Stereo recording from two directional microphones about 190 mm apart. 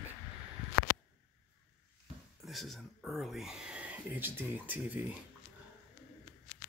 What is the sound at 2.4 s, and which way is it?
Speech, centre (ahead or behind).